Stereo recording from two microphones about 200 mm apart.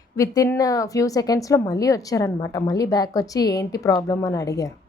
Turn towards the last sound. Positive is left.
turn(degrees=15)  # may be behind; listen again after turning